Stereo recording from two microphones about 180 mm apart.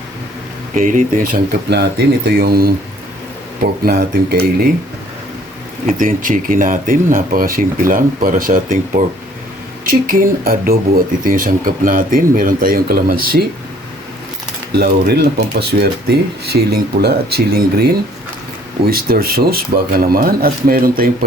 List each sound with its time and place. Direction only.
0.7 s speech: 45° right (ahead or behind)
6.0 s speech: 50° right (ahead or behind)
9.8 s speech: 50° right (ahead or behind)
14.7 s speech: 60° right (ahead or behind)